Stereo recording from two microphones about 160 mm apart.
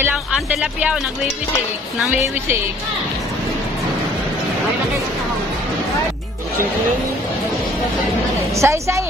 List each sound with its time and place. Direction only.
0.0 s music: 10° right (ahead or behind)
8.5 s a woman's voice: 20° right (ahead or behind)